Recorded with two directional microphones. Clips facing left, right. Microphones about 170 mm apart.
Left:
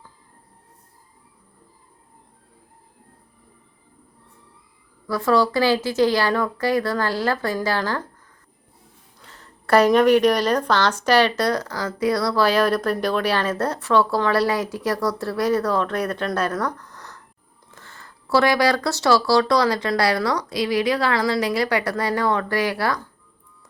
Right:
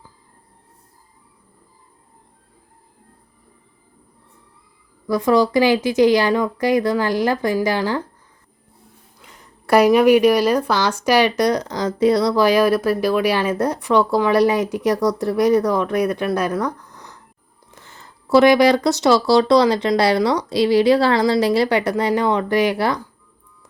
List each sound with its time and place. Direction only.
5.0 s speech: 15° right (ahead or behind)
9.2 s speech: 15° right (ahead or behind)